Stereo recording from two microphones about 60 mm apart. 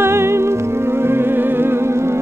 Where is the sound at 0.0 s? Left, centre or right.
Right.